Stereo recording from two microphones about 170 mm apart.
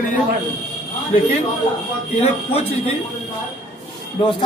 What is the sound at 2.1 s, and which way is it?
Speech, 40° left (ahead or behind).